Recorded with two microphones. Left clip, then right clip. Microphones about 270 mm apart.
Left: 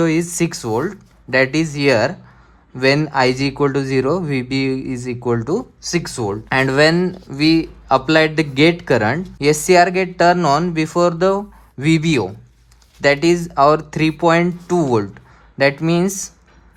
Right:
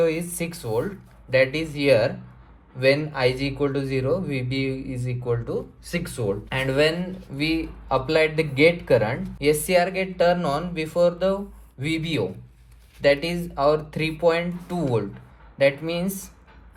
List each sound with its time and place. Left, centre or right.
0.0 s speech: left